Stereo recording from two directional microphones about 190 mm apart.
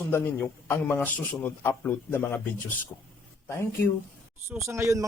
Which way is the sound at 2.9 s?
20° left (ahead or behind).